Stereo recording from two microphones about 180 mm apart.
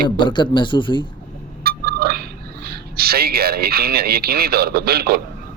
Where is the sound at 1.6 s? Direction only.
60° right (ahead or behind).